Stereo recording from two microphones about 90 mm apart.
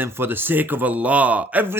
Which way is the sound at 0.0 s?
25° right (ahead or behind).